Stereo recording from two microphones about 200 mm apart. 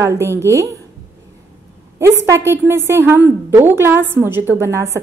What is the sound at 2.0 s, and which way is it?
A woman's voice, 15° right (ahead or behind).